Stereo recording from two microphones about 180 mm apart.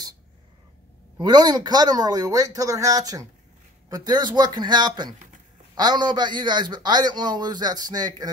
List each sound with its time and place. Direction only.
1.2 s a man's voice: 20° right (ahead or behind)